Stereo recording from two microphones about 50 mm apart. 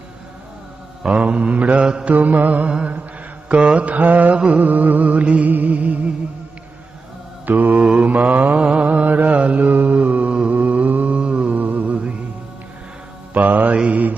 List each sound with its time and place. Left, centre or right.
1.0 s mantra: right
2.1 s mantra: right
7.4 s mantra: right
10.5 s music: right
13.3 s mantra: right